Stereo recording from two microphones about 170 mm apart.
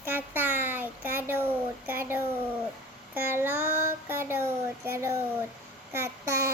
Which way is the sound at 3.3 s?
15° right (ahead or behind).